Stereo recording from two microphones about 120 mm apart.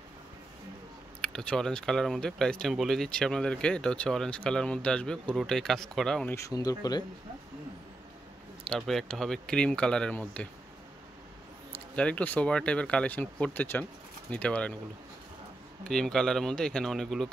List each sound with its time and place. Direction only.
1.2 s speech: 10° left (ahead or behind)
6.3 s speech: 30° left (ahead or behind)
8.6 s speech: centre (ahead or behind)
11.9 s speech: 10° left (ahead or behind)
15.8 s speech: 5° left (ahead or behind)